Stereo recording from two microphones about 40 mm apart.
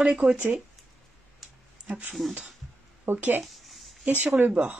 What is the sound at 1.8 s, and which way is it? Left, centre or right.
Speech, right.